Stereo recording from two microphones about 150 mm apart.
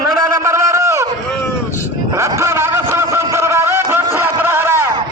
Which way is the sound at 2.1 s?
20° right (ahead or behind).